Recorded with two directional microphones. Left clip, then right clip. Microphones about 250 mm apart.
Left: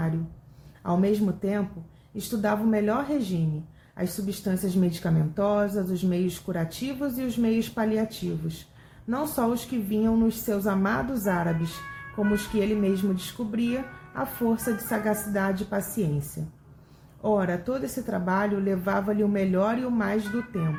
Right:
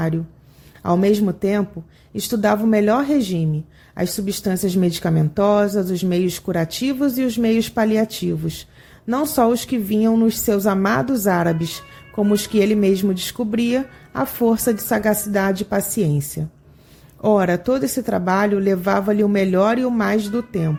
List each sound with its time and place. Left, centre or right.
0.8 s speech: right
9.0 s speech: right
17.2 s speech: right